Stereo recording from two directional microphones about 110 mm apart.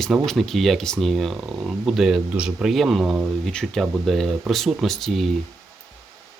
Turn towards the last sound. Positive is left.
turn(degrees=0)  # may be behind; listen again after turning